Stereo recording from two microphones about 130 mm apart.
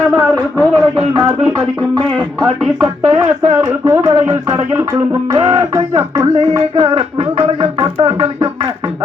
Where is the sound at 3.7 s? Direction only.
25° right (ahead or behind).